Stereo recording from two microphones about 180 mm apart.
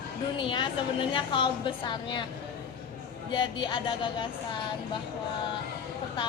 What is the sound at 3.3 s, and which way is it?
Speech, 25° left (ahead or behind).